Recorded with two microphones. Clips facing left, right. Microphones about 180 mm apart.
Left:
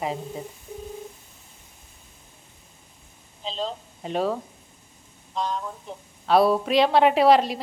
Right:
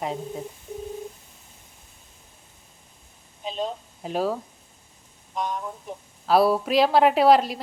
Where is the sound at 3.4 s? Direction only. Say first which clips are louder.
Right 1 dB; 15° right (ahead or behind).